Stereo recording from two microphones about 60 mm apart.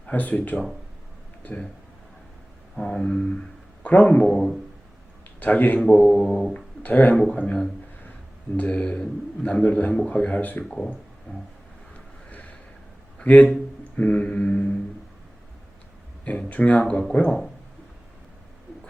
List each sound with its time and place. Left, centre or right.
0.1 s a man's voice: left
2.7 s mantra: centre
3.8 s a man's voice: left
4.2 s mantra: centre
5.4 s a man's voice: left
5.8 s mantra: centre
6.5 s a man's voice: left
10.6 s mantra: centre
13.1 s a man's voice: left
13.9 s mantra: left
16.2 s a man's voice: left
16.9 s mantra: centre